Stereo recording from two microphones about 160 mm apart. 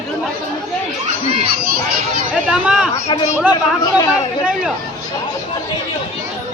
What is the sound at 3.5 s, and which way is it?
Speech, 25° left (ahead or behind).